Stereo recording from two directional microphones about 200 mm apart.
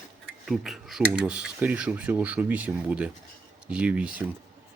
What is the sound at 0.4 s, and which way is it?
Speech, centre (ahead or behind).